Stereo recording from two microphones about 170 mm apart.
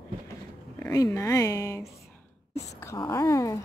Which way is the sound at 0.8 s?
20° left (ahead or behind).